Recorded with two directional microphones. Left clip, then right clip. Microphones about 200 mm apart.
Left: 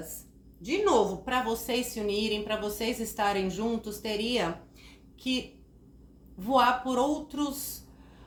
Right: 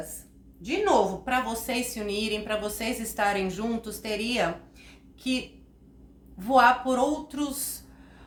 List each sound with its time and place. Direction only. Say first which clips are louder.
0.6 s a woman's voice: right 2 dB; 15° right (ahead or behind)
6.4 s a woman's voice: right 4 dB; 15° right (ahead or behind)